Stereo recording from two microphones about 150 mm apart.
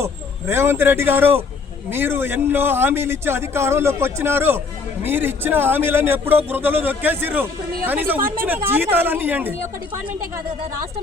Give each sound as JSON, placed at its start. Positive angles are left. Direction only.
{"t": 0.0, "sound": "a man's voice", "side_deg": -15}